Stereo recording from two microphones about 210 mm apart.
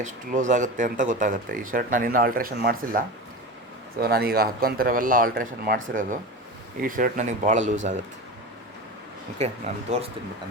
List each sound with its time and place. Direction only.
0.0 s speech: 35° right (ahead or behind)
4.0 s speech: 50° right (ahead or behind)
9.7 s speech: 30° right (ahead or behind)